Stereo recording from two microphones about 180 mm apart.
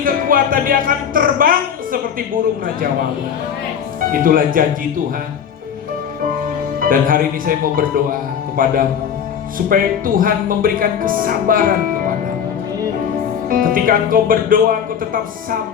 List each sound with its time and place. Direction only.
0.0 s speech: 50° right (ahead or behind)
4.1 s speech: 50° right (ahead or behind)
6.7 s speech: 50° right (ahead or behind)
13.5 s speech: 50° right (ahead or behind)